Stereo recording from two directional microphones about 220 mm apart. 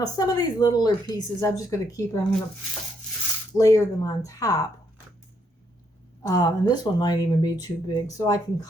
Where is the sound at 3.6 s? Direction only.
15° left (ahead or behind).